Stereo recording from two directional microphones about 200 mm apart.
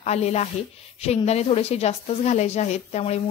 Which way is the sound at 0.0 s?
35° left (ahead or behind).